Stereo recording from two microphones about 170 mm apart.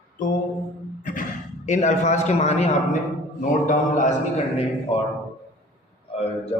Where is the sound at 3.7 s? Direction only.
45° left (ahead or behind).